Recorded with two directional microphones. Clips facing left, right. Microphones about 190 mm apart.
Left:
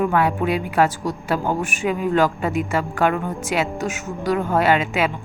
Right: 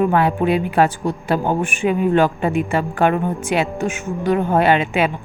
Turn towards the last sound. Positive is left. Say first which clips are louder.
# right 2 dB
turn(degrees=-25)  # may be behind; listen again after turning